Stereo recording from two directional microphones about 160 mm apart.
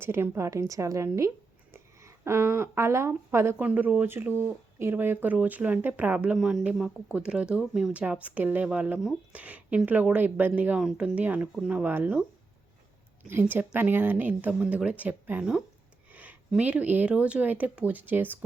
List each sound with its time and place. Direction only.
0.0 s a woman's voice: 15° right (ahead or behind)
13.2 s speech: 10° right (ahead or behind)